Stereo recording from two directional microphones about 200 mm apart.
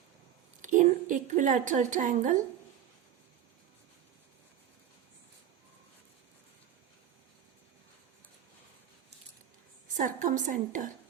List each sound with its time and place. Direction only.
0.6 s a woman's voice: 40° right (ahead or behind)
10.0 s a woman's voice: 40° right (ahead or behind)